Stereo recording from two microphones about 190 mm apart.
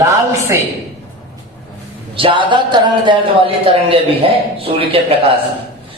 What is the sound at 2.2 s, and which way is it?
A man's voice, 25° right (ahead or behind).